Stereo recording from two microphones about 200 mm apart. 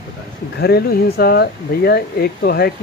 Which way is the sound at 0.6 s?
50° left (ahead or behind).